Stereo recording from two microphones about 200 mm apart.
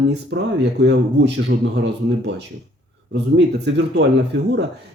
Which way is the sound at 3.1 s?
60° right (ahead or behind).